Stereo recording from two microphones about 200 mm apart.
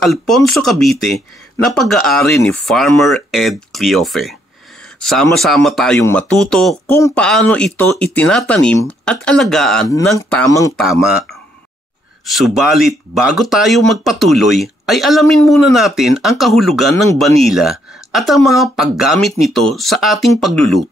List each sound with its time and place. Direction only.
0.0 s speech: centre (ahead or behind)
10.1 s speech: 15° left (ahead or behind)
10.8 s speech: centre (ahead or behind)